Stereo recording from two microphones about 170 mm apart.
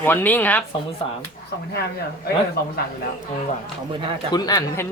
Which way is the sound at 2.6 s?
70° left (ahead or behind).